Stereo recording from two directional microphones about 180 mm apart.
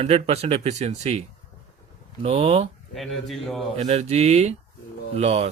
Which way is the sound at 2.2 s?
30° right (ahead or behind).